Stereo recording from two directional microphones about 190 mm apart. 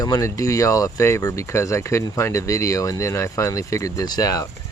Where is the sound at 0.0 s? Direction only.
20° left (ahead or behind).